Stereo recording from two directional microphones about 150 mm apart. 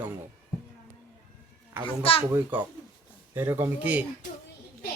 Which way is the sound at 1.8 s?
40° left (ahead or behind).